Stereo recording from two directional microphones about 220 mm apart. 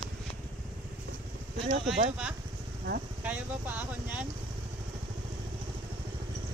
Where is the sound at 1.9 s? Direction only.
5° right (ahead or behind).